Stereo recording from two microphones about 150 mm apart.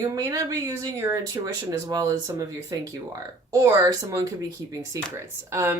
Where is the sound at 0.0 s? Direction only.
25° right (ahead or behind).